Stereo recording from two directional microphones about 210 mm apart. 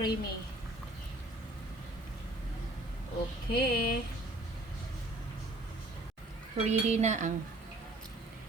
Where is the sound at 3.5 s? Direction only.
50° left (ahead or behind).